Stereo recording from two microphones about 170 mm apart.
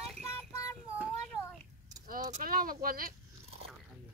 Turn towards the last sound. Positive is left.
turn(degrees=-60)  # may be behind; listen again after turning